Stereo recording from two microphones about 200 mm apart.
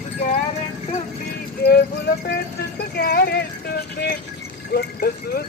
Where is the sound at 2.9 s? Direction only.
50° left (ahead or behind).